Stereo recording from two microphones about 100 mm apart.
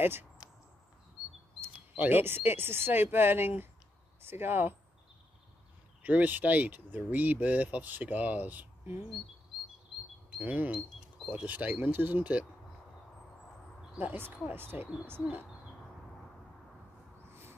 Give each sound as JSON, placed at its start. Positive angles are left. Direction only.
{"t": 0.0, "sound": "speech", "side_deg": -20}
{"t": 1.6, "sound": "speech", "side_deg": -20}
{"t": 6.0, "sound": "speech", "side_deg": -15}
{"t": 10.4, "sound": "speech", "side_deg": -15}
{"t": 13.9, "sound": "speech", "side_deg": -20}
{"t": 17.3, "sound": "a sound", "side_deg": -25}